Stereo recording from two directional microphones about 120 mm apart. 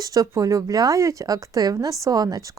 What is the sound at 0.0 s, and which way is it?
A woman's voice, 30° right (ahead or behind).